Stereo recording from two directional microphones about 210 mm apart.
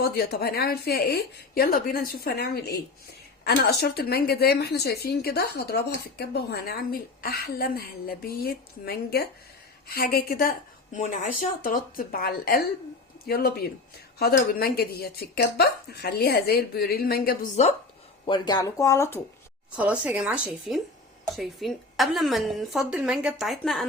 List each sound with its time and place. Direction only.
0.0 s a woman's voice: 45° left (ahead or behind)
18.3 s speech: 20° left (ahead or behind)
19.7 s a woman's voice: 5° right (ahead or behind)